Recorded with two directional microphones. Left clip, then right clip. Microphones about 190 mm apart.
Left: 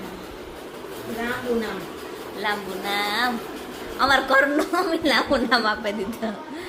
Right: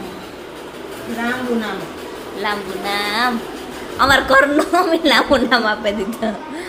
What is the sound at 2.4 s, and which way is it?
A woman's voice, 5° right (ahead or behind).